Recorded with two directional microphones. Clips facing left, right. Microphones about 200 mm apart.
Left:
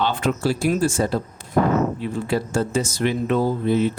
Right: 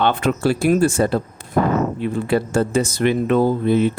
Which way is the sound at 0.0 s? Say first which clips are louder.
Right 4 dB; 60° right (ahead or behind).